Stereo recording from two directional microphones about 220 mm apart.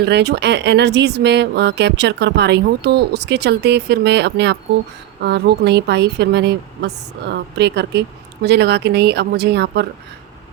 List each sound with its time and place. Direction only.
0.0 s a woman's voice: 50° right (ahead or behind)